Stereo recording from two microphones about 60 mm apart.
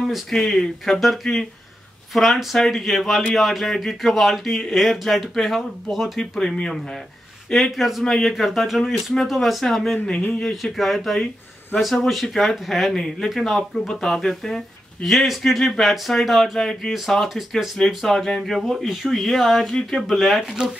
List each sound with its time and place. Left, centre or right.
0.3 s speech: centre
6.1 s speech: centre
7.5 s speech: centre